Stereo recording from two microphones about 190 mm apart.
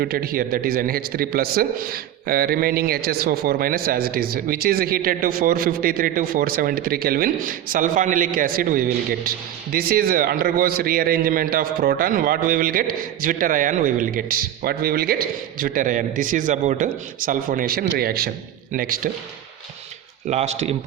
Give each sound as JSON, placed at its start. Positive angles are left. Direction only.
{"t": 0.0, "sound": "a man's voice", "side_deg": -50}
{"t": 20.2, "sound": "a man's voice", "side_deg": -35}